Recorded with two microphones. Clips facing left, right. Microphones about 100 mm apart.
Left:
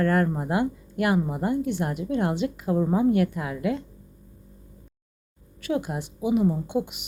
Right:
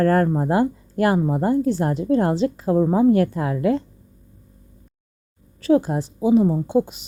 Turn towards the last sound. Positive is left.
turn(degrees=-35)  # may be behind; listen again after turning